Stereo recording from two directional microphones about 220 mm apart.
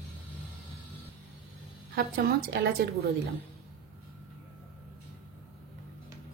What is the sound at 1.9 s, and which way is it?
Speech, 45° right (ahead or behind).